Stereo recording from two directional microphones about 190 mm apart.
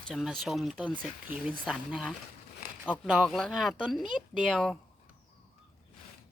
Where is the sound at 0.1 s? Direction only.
Centre (ahead or behind).